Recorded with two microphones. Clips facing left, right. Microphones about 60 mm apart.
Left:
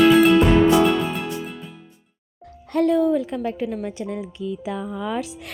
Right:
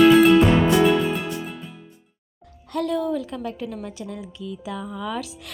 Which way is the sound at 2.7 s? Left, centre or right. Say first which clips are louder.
Left 6 dB; left.